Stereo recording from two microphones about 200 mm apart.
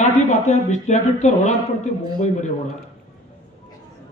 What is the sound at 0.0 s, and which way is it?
Speech, 35° left (ahead or behind).